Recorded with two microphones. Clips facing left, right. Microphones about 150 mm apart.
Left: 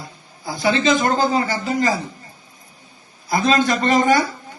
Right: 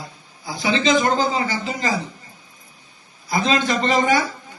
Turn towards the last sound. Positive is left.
turn(degrees=45)  # may be behind; listen again after turning